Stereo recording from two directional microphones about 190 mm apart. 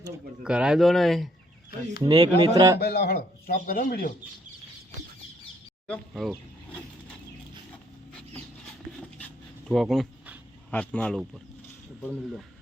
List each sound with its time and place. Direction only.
0.4 s speech: 5° right (ahead or behind)
2.0 s speech: 20° right (ahead or behind)
2.8 s speech: 60° left (ahead or behind)
5.9 s speech: centre (ahead or behind)
9.0 s a sound: 5° left (ahead or behind)